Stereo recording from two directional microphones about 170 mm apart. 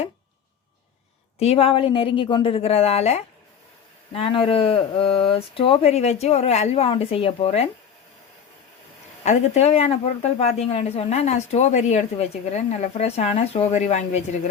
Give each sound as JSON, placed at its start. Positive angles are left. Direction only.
{"t": 1.4, "sound": "a woman's voice", "side_deg": 35}
{"t": 9.2, "sound": "a woman's voice", "side_deg": 40}